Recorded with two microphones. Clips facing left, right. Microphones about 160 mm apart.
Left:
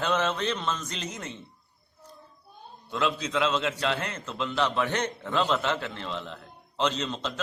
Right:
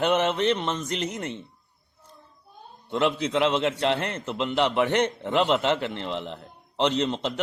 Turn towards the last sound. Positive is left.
turn(degrees=-20)  # may be behind; listen again after turning